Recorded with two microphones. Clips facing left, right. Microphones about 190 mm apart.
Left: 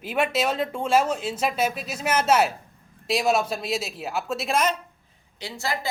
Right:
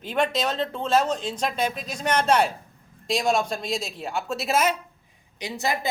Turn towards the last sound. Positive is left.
turn(degrees=-20)  # may be behind; listen again after turning